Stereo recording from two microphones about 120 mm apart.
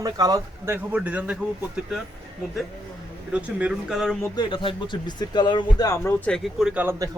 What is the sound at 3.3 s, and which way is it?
Speech, 5° right (ahead or behind).